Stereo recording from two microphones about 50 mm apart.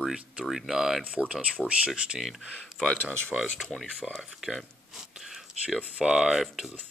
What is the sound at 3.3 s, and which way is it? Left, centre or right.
Speech, centre.